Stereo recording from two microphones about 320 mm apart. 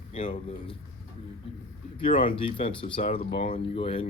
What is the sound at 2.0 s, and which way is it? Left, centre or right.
Speech, centre.